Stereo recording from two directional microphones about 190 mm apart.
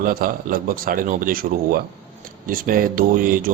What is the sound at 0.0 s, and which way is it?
A man's voice, 50° right (ahead or behind).